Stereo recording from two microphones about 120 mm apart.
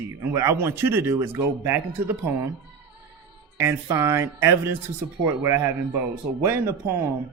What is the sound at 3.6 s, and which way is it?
Speech, 25° right (ahead or behind).